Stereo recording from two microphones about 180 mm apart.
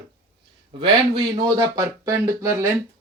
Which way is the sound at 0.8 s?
20° right (ahead or behind).